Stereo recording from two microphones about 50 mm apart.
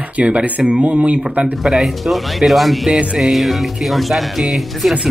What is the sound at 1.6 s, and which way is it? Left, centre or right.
Speech, centre.